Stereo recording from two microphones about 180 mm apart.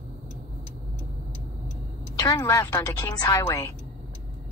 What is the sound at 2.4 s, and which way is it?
Speech, 15° left (ahead or behind).